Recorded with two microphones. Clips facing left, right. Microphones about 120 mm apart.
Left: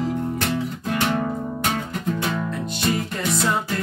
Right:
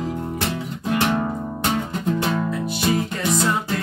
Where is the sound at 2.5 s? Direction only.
5° right (ahead or behind).